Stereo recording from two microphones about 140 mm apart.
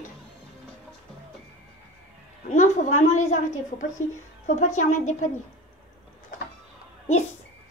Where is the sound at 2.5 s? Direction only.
60° left (ahead or behind).